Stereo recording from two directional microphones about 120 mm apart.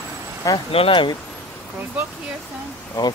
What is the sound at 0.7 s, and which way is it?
Speech, 50° left (ahead or behind).